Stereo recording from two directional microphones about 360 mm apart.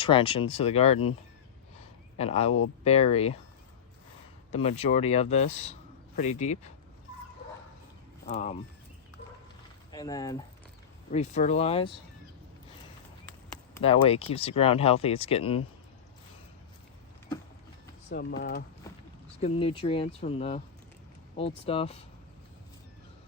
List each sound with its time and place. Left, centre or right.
0.0 s speech: centre
2.1 s speech: centre
4.5 s speech: centre
8.3 s speech: centre
9.9 s speech: centre
13.8 s speech: centre
18.1 s speech: left
18.8 s a sound: centre
19.4 s speech: centre